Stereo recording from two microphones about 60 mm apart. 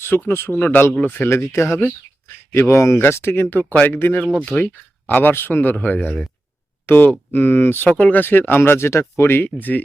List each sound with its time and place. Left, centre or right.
0.3 s speech: left
0.5 s speech: left
1.3 s speech: left
3.5 s speech: left
7.9 s speech: left